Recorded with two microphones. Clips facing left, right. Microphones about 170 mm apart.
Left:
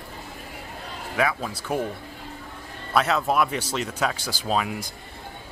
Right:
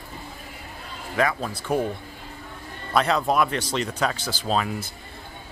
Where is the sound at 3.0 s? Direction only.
5° left (ahead or behind).